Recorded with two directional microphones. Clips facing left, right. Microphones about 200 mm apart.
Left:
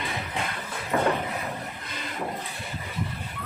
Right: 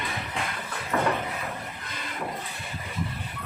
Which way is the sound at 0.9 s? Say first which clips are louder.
Left 2 dB; 25° left (ahead or behind).